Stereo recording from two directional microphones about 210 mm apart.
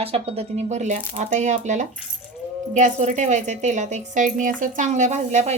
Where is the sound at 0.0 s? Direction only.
30° right (ahead or behind).